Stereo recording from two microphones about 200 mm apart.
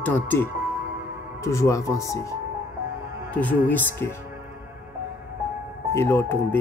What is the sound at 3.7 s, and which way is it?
Speech, 10° left (ahead or behind).